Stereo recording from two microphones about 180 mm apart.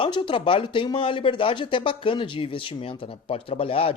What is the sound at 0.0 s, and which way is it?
Speech, 25° left (ahead or behind).